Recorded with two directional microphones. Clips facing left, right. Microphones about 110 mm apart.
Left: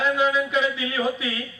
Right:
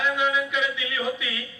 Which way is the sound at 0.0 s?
35° left (ahead or behind).